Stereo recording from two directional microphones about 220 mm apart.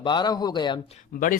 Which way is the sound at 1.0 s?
40° left (ahead or behind).